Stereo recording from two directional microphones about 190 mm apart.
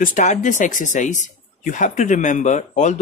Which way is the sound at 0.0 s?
40° left (ahead or behind).